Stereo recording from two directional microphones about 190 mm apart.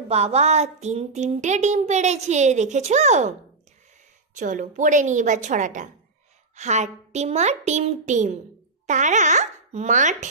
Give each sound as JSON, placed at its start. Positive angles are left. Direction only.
{"t": 0.1, "sound": "speech", "side_deg": -35}
{"t": 4.4, "sound": "speech", "side_deg": -40}